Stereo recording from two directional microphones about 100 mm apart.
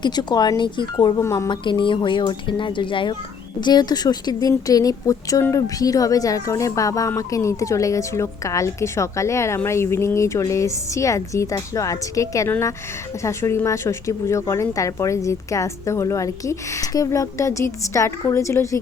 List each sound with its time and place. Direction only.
0.0 s speech: 45° left (ahead or behind)
1.2 s speech: 30° left (ahead or behind)
1.5 s speech: 50° left (ahead or behind)
3.6 s speech: 45° left (ahead or behind)